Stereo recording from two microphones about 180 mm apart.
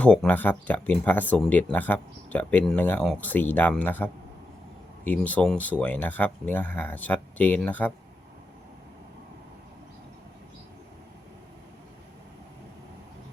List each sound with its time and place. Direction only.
0.0 s speech: 5° left (ahead or behind)